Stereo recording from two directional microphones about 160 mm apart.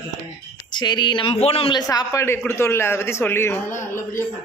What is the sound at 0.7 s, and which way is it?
A man's voice, 30° left (ahead or behind).